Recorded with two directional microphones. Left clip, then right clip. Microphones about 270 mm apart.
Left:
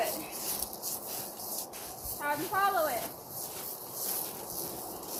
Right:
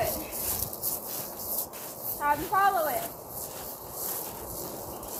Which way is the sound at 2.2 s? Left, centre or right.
Centre.